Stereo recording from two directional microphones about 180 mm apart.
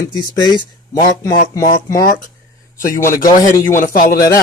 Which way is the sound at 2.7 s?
50° left (ahead or behind).